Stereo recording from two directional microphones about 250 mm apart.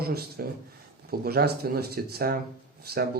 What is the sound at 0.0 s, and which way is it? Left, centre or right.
Speech, right.